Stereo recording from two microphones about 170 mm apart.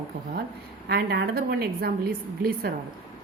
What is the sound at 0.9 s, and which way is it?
A woman's voice, 70° right (ahead or behind).